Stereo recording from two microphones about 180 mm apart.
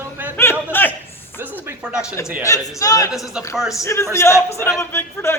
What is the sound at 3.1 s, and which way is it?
Speech, centre (ahead or behind).